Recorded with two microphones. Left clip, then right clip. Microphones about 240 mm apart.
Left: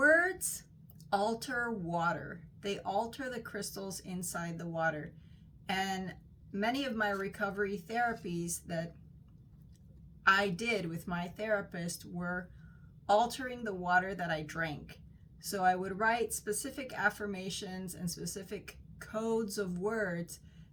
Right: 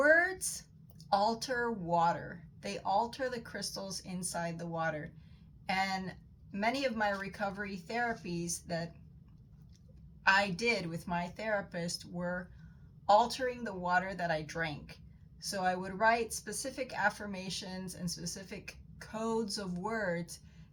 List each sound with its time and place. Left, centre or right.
0.0 s a sound: centre
0.9 s a woman's voice: centre
6.1 s a woman's voice: centre
10.2 s a woman's voice: centre